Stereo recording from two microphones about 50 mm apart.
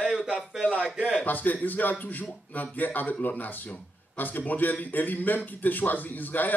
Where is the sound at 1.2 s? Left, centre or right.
Left.